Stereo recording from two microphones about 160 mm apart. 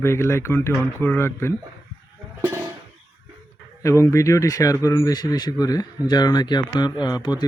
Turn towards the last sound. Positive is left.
turn(degrees=25)  # may be behind; listen again after turning